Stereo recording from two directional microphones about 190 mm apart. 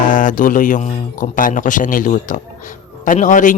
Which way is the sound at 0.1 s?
45° left (ahead or behind).